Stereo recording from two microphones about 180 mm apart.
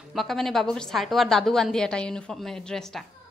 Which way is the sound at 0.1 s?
Centre (ahead or behind).